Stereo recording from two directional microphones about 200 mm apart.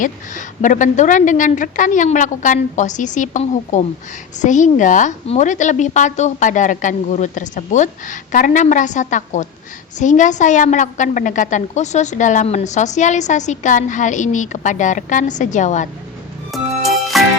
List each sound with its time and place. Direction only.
0.0 s a woman's voice: 40° left (ahead or behind)
16.5 s music: centre (ahead or behind)